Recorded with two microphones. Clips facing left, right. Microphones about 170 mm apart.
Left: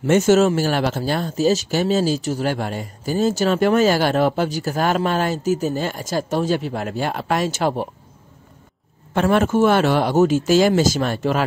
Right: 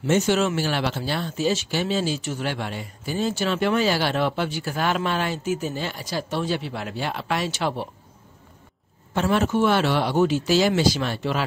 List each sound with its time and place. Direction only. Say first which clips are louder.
0.0 s speech: left 6 dB; 50° left (ahead or behind)
9.1 s speech: left 4 dB; 55° left (ahead or behind)